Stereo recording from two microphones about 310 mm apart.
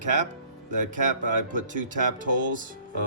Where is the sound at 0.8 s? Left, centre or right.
Right.